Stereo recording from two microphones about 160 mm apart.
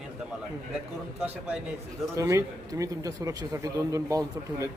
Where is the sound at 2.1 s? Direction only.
20° right (ahead or behind).